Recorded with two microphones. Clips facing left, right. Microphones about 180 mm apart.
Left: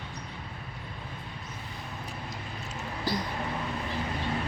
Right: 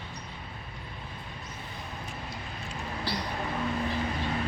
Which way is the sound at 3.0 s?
45° left (ahead or behind).